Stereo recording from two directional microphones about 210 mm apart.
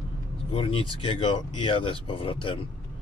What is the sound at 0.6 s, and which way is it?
Speech, 25° left (ahead or behind).